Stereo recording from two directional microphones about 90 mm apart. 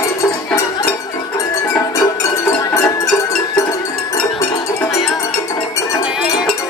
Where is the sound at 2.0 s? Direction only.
35° left (ahead or behind).